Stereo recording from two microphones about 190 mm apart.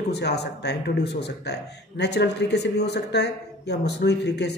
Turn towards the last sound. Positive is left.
turn(degrees=65)  # may be behind; listen again after turning